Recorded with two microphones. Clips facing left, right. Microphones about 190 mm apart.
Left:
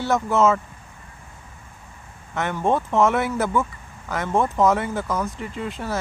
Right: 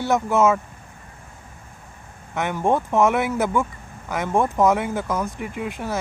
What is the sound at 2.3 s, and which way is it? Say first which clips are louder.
Speech: right 1 dB; 15° right (ahead or behind).